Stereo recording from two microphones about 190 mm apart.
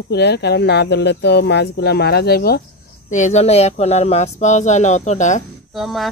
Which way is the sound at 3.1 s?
40° left (ahead or behind).